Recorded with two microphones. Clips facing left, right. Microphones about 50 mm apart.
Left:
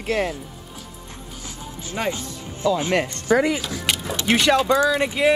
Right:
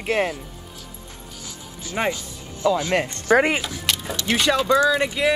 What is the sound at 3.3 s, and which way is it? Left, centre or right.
Speech, right.